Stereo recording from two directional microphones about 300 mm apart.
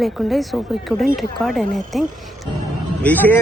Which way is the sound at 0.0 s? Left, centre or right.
Centre.